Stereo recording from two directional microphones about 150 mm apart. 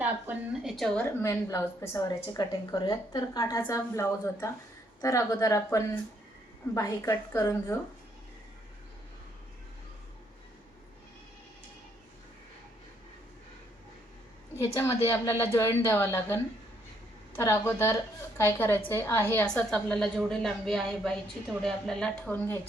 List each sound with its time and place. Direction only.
0.0 s a woman's voice: 5° right (ahead or behind)
1.2 s a woman's voice: 20° left (ahead or behind)
14.5 s a woman's voice: 20° left (ahead or behind); by 22.4 s 5° left (ahead or behind)